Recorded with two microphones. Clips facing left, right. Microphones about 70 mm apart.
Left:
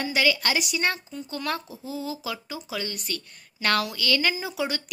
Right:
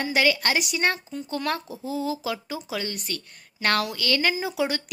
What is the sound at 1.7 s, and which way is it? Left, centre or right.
Speech, right.